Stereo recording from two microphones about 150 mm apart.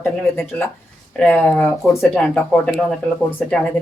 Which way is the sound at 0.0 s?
10° left (ahead or behind).